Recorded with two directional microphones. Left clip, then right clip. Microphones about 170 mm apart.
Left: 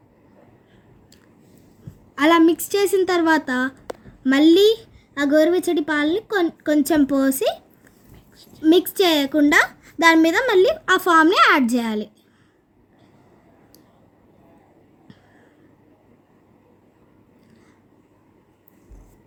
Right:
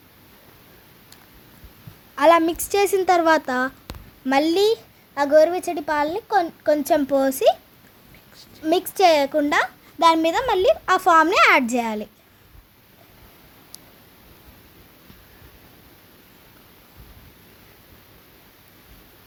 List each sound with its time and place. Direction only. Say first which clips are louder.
2.1 s a woman's voice: even; 10° right (ahead or behind)
8.4 s a woman's voice: left 5 dB; 25° right (ahead or behind)
9.4 s a child's voice: left 4 dB; centre (ahead or behind)
10.0 s a woman's voice: left 2 dB; 10° left (ahead or behind); by 12.0 s 10° right (ahead or behind)